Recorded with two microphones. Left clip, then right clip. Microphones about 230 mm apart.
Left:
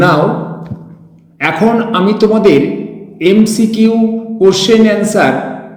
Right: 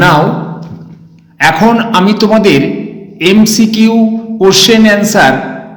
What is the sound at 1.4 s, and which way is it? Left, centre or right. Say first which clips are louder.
Speech: right 4 dB; right.